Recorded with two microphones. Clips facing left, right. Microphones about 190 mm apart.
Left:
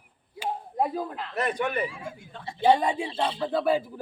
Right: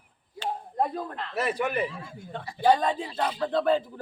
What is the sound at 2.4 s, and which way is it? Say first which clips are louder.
Speech: left 1 dB; 25° left (ahead or behind).